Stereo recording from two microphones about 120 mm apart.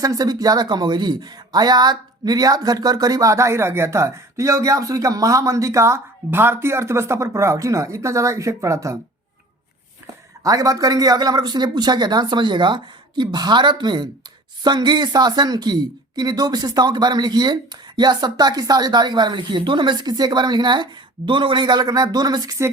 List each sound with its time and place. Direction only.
0.0 s speech: 30° right (ahead or behind)
10.4 s a woman's voice: 30° right (ahead or behind)